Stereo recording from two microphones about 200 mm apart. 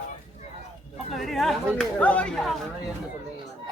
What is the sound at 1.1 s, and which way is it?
Speech, centre (ahead or behind).